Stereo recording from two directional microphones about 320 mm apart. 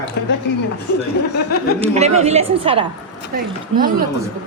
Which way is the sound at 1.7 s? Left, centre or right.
Centre.